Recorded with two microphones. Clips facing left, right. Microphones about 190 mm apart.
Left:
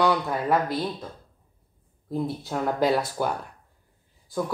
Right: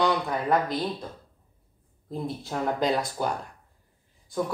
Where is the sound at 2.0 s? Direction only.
Centre (ahead or behind).